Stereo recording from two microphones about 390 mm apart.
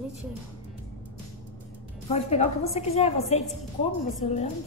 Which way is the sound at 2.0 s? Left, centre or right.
Centre.